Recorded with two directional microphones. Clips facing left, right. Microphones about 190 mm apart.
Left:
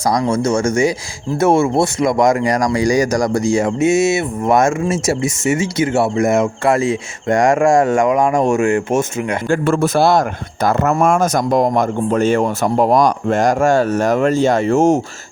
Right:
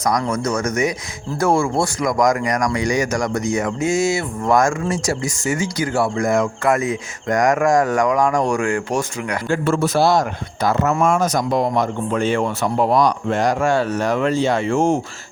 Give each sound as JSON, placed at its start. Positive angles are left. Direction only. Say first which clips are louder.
{"t": 0.1, "sound": "speech", "louder": "left 5 dB", "side_deg": 30}
{"t": 9.5, "sound": "a man's voice", "louder": "left 3 dB", "side_deg": 55}